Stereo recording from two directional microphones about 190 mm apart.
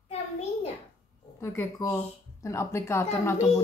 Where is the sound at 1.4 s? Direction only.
15° left (ahead or behind).